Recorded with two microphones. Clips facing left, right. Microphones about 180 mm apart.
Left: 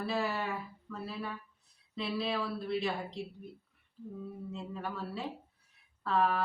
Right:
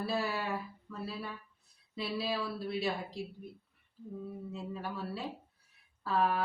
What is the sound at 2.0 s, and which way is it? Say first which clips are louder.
Speech: left 1 dB; 5° right (ahead or behind).